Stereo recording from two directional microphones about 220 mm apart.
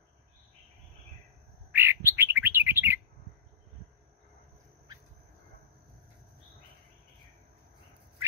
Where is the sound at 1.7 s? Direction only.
10° right (ahead or behind).